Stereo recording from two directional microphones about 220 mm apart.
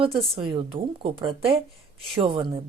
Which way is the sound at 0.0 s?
25° right (ahead or behind).